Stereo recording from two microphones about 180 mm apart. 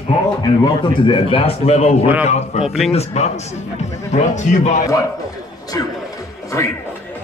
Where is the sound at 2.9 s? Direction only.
35° left (ahead or behind).